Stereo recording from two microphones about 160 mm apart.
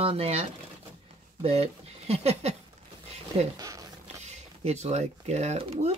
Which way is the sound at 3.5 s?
20° right (ahead or behind).